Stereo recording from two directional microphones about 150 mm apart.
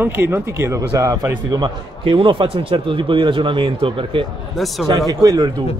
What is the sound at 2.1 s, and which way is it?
A man's voice, 35° right (ahead or behind).